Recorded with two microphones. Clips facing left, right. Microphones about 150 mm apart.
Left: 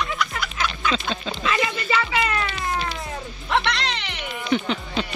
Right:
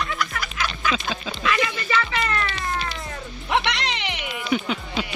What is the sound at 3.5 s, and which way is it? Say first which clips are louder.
Music: even; 15° right (ahead or behind).